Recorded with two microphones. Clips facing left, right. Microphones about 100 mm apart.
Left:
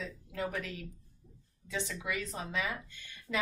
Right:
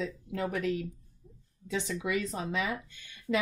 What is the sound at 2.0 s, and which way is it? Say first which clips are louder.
Speech: right 6 dB; 20° right (ahead or behind).